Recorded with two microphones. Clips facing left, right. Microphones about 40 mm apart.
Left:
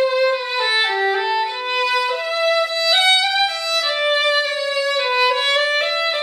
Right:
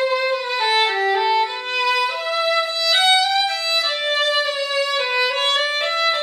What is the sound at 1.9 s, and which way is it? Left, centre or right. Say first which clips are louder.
Music: left 1 dB; centre.